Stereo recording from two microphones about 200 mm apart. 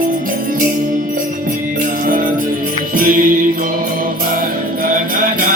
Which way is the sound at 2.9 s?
45° right (ahead or behind).